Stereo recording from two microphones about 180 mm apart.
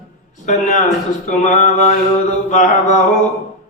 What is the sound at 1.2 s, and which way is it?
Mantra, 40° left (ahead or behind).